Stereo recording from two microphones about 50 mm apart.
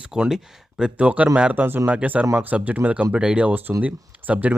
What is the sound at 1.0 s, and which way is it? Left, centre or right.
Speech, right.